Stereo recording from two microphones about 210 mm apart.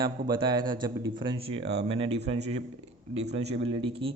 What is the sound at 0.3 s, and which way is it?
Speech, 20° right (ahead or behind).